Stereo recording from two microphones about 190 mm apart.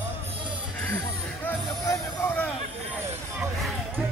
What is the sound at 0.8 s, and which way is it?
Music, 10° left (ahead or behind).